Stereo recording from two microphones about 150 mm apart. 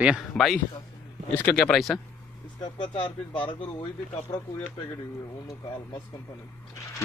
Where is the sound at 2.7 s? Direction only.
30° left (ahead or behind).